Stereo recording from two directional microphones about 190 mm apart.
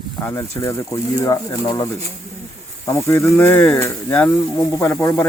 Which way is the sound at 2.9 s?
15° left (ahead or behind).